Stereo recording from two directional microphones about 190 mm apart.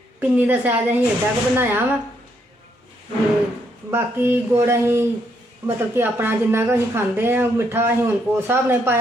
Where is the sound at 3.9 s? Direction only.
10° right (ahead or behind).